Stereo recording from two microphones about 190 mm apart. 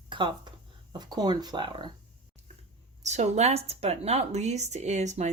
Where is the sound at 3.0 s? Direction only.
35° right (ahead or behind).